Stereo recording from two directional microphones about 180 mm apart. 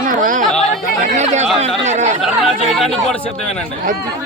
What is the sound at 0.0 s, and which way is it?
Chatter, 50° right (ahead or behind).